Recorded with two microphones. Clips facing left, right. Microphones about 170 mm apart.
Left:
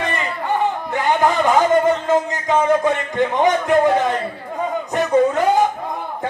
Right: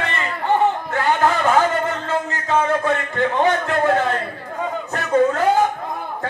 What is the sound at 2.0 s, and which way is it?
Music, 15° left (ahead or behind).